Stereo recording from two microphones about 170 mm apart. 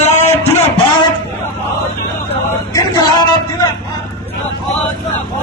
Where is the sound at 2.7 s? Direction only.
25° left (ahead or behind).